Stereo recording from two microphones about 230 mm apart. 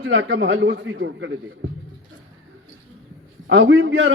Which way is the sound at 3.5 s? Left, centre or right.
Right.